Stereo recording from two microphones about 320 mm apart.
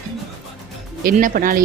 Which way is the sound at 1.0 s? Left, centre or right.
Right.